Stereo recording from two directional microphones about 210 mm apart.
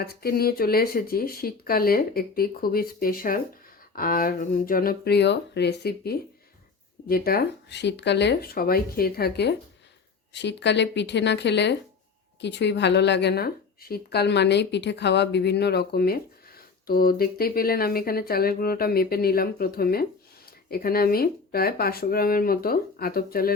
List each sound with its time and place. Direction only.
0.0 s a woman's voice: 45° left (ahead or behind)